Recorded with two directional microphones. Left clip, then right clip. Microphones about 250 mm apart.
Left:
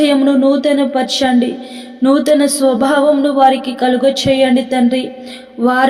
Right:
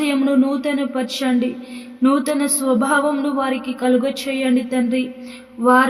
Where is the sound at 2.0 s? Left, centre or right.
Centre.